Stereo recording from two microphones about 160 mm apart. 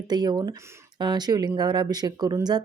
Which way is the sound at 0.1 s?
25° right (ahead or behind).